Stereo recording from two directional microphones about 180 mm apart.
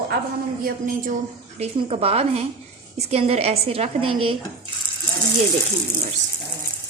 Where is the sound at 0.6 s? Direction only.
50° right (ahead or behind).